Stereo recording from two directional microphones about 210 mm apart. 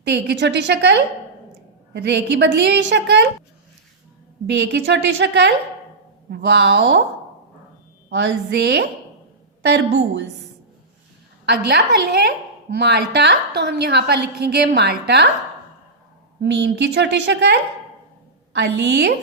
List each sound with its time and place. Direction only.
0.0 s a woman's voice: 55° right (ahead or behind)
4.4 s a woman's voice: 55° right (ahead or behind)
8.1 s a woman's voice: 55° right (ahead or behind)
11.4 s a woman's voice: 50° right (ahead or behind)
16.4 s a woman's voice: 55° right (ahead or behind)